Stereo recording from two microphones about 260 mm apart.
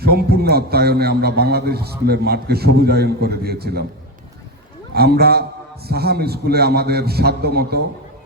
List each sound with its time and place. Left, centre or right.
0.0 s a man's voice: right
4.9 s a man's voice: right